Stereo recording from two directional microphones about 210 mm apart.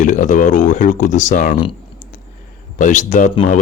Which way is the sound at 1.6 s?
35° left (ahead or behind).